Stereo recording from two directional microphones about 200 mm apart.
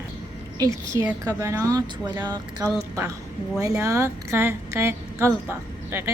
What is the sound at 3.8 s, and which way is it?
A woman's voice, 15° right (ahead or behind).